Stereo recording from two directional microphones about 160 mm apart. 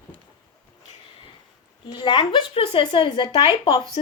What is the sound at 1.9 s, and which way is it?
Speech, 25° left (ahead or behind).